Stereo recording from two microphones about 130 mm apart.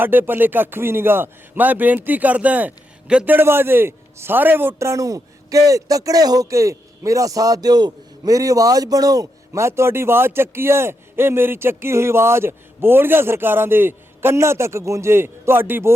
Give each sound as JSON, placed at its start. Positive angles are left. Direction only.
{"t": 0.0, "sound": "a man's voice", "side_deg": -15}